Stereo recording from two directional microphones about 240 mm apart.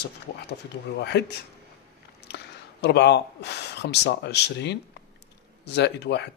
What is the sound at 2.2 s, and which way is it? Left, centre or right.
Speech, left.